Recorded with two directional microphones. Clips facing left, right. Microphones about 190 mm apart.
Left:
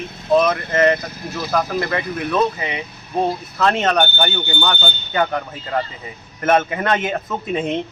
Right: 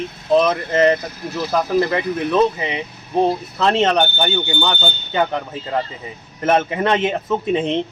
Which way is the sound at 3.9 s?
10° right (ahead or behind).